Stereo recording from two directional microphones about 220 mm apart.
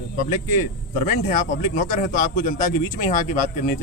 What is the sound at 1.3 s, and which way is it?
A man's voice, 35° left (ahead or behind).